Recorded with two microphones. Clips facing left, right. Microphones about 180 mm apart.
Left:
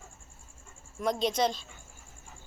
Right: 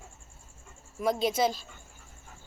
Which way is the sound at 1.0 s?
5° right (ahead or behind).